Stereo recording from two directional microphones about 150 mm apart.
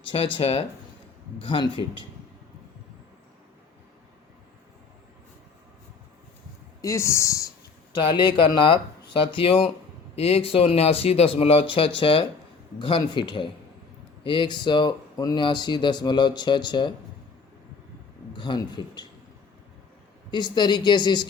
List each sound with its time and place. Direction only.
0.3 s speech: 40° left (ahead or behind)
6.8 s speech: 20° left (ahead or behind)
18.3 s speech: 30° left (ahead or behind)
20.3 s speech: 30° left (ahead or behind)